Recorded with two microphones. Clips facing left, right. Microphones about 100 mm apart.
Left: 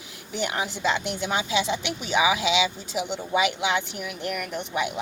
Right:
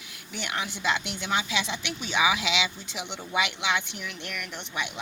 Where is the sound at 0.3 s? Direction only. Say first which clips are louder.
Left 5 dB; 45° left (ahead or behind).